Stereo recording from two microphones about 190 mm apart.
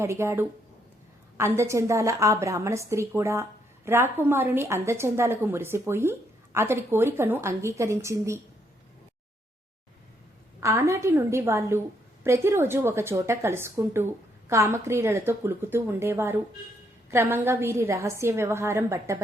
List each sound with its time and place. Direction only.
0.0 s a woman's voice: 15° right (ahead or behind)
10.6 s a woman's voice: 15° right (ahead or behind)